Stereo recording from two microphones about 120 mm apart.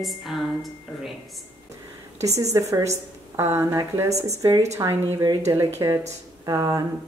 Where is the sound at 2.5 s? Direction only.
25° right (ahead or behind).